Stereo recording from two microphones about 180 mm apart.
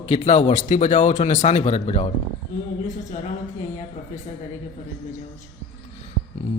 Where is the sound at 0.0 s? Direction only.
35° left (ahead or behind).